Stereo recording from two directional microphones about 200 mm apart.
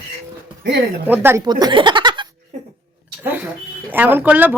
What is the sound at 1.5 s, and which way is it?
Speech, 20° right (ahead or behind).